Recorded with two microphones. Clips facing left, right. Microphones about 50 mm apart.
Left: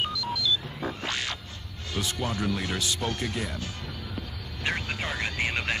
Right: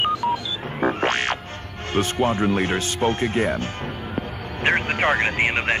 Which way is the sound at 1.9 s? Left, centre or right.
Right.